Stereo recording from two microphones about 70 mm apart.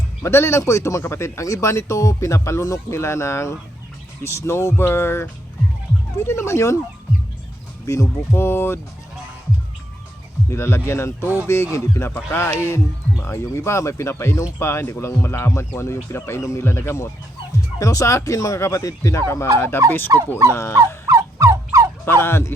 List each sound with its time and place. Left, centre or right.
0.2 s speech: left
3.0 s speech: left
7.9 s speech: left
10.5 s speech: left
20.1 s speech: right
20.5 s speech: left
20.7 s fowl: right
22.0 s speech: left